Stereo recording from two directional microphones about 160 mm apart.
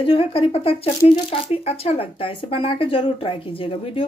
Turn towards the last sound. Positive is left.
turn(degrees=35)  # may be behind; listen again after turning